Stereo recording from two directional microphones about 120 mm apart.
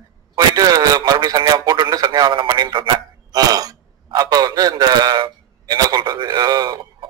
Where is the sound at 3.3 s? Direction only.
30° right (ahead or behind).